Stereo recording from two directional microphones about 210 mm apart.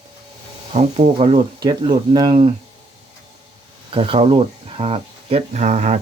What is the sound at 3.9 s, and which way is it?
Speech, 25° right (ahead or behind).